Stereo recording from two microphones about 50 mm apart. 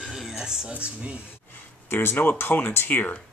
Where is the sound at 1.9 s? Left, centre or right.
Left.